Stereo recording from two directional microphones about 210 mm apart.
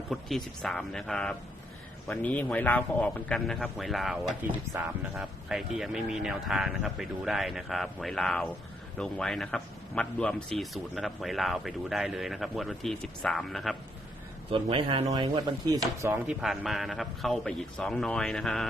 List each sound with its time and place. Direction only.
0.1 s speech: centre (ahead or behind)
4.7 s speech: 10° right (ahead or behind)
14.5 s speech: 25° right (ahead or behind); by 18.7 s centre (ahead or behind)